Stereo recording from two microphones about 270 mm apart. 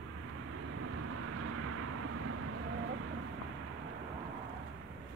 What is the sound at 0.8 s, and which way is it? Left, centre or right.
Vehicle, right.